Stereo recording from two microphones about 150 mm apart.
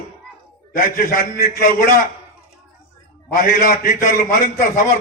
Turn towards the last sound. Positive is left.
turn(degrees=65)  # may be behind; listen again after turning